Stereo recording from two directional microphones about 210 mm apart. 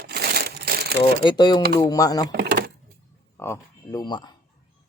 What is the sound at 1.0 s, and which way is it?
Speech, 20° left (ahead or behind).